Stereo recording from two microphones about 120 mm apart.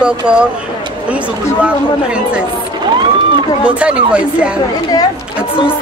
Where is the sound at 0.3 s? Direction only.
10° right (ahead or behind).